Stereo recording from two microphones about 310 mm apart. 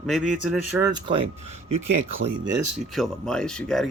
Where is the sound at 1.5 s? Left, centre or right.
Right.